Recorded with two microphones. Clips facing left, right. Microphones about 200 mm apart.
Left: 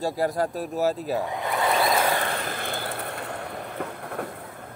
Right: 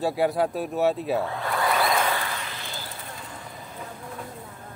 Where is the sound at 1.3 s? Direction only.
20° left (ahead or behind).